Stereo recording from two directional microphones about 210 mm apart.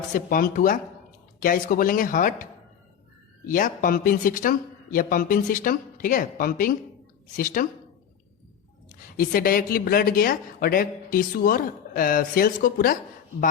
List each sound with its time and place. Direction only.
0.1 s speech: 40° left (ahead or behind)
9.1 s speech: 45° left (ahead or behind)